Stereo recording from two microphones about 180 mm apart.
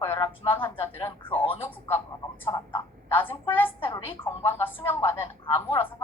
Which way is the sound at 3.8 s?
30° left (ahead or behind).